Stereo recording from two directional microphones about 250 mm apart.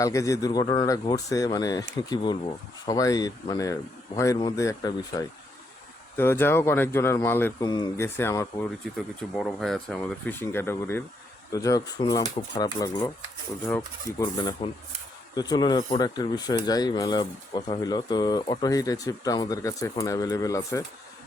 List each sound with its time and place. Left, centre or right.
0.0 s speech: centre